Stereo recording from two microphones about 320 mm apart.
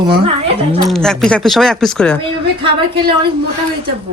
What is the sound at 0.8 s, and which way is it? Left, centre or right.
A man's voice, centre.